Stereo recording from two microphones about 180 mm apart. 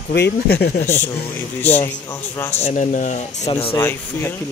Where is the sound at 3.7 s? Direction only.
15° left (ahead or behind).